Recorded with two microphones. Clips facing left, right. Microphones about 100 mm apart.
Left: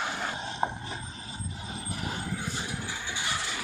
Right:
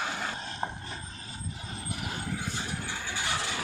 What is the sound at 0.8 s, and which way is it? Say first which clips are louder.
Vehicle: left 2 dB; 15° left (ahead or behind).